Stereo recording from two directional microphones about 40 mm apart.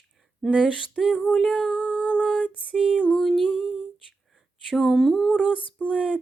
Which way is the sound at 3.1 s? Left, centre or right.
Centre.